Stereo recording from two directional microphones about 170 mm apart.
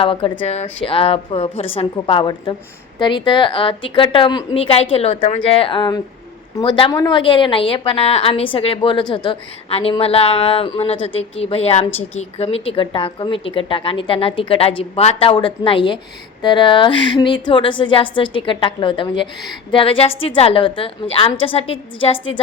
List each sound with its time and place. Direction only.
0.0 s a woman's voice: 30° left (ahead or behind)